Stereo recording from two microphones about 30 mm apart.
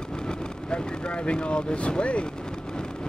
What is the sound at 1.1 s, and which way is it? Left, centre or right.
Speech, left.